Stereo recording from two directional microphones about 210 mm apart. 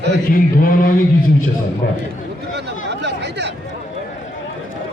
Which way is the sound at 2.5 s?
55° right (ahead or behind).